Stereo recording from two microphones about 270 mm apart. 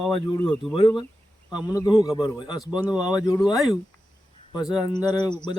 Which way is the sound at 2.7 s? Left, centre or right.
Centre.